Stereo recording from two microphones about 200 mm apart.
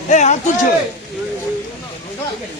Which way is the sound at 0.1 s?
35° left (ahead or behind).